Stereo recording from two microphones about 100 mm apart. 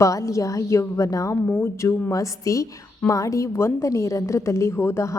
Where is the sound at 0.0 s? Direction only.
30° left (ahead or behind).